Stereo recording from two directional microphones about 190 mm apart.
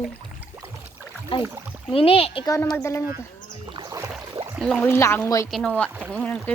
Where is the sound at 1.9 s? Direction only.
30° left (ahead or behind).